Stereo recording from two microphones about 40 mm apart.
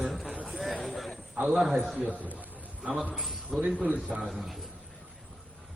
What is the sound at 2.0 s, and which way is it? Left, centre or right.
Speech, right.